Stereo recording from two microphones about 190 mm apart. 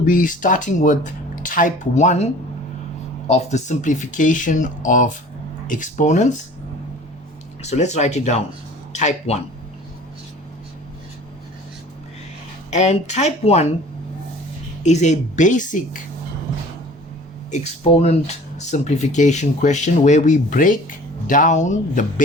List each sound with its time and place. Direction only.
0.0 s speech: 45° left (ahead or behind)
7.6 s speech: 35° left (ahead or behind)
12.7 s speech: 35° left (ahead or behind)
14.8 s speech: 35° left (ahead or behind)
17.5 s speech: 35° left (ahead or behind)